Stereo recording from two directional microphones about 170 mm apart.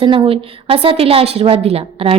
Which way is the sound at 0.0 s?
30° right (ahead or behind).